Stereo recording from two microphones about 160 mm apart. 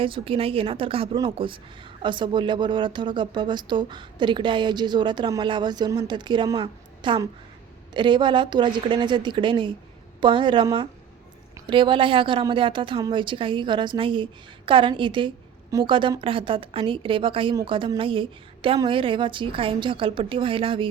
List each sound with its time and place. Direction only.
0.0 s a woman's voice: 35° right (ahead or behind)